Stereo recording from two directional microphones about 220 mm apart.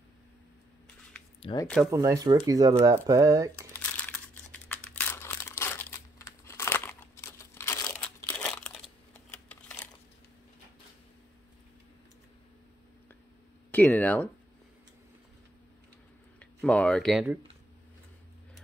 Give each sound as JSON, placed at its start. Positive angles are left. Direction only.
{"t": 1.4, "sound": "speech", "side_deg": 20}
{"t": 1.9, "sound": "speech", "side_deg": -15}
{"t": 3.9, "sound": "crumpling", "side_deg": 5}
{"t": 9.5, "sound": "a sound", "side_deg": 5}
{"t": 13.7, "sound": "speech", "side_deg": 5}
{"t": 16.3, "sound": "speech", "side_deg": 5}